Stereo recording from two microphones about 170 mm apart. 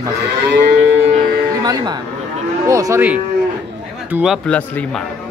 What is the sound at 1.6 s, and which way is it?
Speech, 25° right (ahead or behind).